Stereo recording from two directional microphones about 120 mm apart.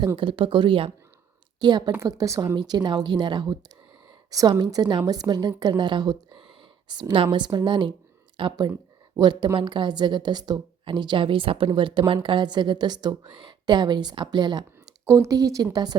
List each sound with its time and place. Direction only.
0.2 s a woman's voice: 45° right (ahead or behind); by 2.6 s 25° right (ahead or behind)
2.6 s a woman's voice: 35° right (ahead or behind)
15.0 s speech: 25° right (ahead or behind)